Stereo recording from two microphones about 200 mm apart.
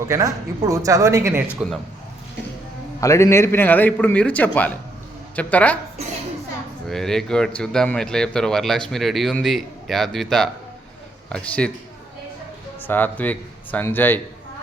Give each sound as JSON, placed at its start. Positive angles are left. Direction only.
{"t": 0.1, "sound": "speech", "side_deg": -15}
{"t": 3.0, "sound": "a man's voice", "side_deg": 15}
{"t": 6.8, "sound": "speech", "side_deg": 0}
{"t": 12.9, "sound": "a man's voice", "side_deg": 10}